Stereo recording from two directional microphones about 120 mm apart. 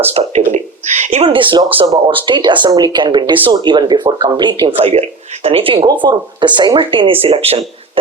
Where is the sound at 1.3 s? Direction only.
45° right (ahead or behind).